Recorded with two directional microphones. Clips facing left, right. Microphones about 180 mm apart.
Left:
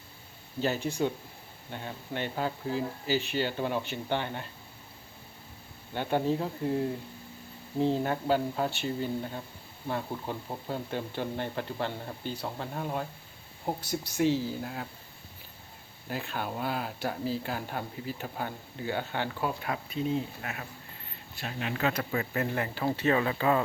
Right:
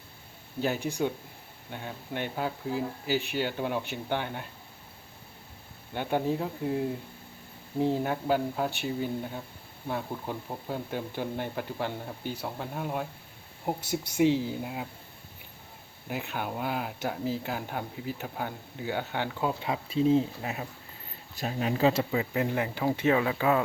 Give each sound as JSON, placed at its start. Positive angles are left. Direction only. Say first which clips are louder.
{"t": 0.6, "sound": "speech", "louder": "even", "side_deg": -10}
{"t": 5.9, "sound": "speech", "louder": "even", "side_deg": -10}
{"t": 16.0, "sound": "speech", "louder": "right 1 dB", "side_deg": -15}
{"t": 20.0, "sound": "speech", "louder": "right 8 dB", "side_deg": -30}
{"t": 21.3, "sound": "speech", "louder": "right 5 dB", "side_deg": -40}
{"t": 22.1, "sound": "speech", "louder": "right 2 dB", "side_deg": -15}